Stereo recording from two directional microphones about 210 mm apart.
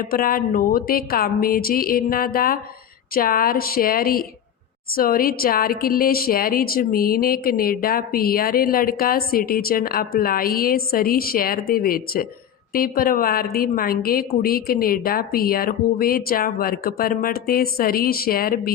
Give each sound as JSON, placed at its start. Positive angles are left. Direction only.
{"t": 0.0, "sound": "a woman's voice", "side_deg": 45}